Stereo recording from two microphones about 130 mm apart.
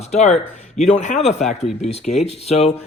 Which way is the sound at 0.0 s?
55° left (ahead or behind).